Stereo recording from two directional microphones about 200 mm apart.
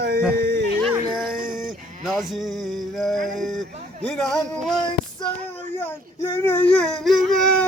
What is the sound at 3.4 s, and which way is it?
Speech, centre (ahead or behind).